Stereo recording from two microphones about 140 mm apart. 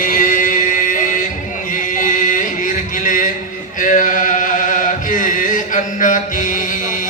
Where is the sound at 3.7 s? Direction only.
70° left (ahead or behind).